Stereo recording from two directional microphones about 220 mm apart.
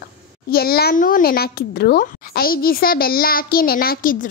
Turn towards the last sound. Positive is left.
turn(degrees=40)  # may be behind; listen again after turning